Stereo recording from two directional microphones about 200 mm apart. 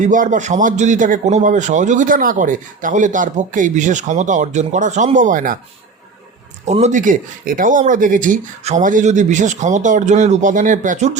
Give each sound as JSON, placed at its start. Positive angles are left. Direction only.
{"t": 0.0, "sound": "a man's voice", "side_deg": -40}
{"t": 6.7, "sound": "a man's voice", "side_deg": -35}